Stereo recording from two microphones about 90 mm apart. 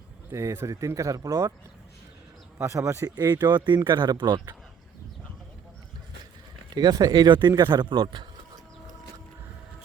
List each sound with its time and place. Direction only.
0.3 s speech: 35° right (ahead or behind)
2.6 s speech: 35° right (ahead or behind)
3.2 s speech: 50° right (ahead or behind)
6.7 s speech: 45° right (ahead or behind); by 8.3 s 60° right (ahead or behind)